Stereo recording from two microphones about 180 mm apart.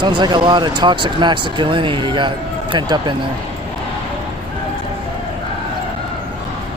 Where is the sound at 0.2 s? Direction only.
25° right (ahead or behind).